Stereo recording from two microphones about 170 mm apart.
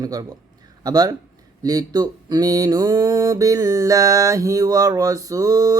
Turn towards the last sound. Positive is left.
turn(degrees=-20)  # may be behind; listen again after turning